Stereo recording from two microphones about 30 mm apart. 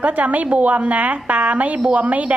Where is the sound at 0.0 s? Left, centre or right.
Right.